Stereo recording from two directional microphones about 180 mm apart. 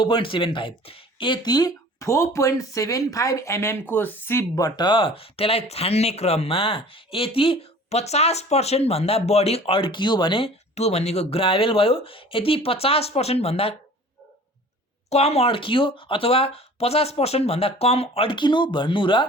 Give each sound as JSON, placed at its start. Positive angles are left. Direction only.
{"t": 0.0, "sound": "speech", "side_deg": 30}
{"t": 15.1, "sound": "speech", "side_deg": 35}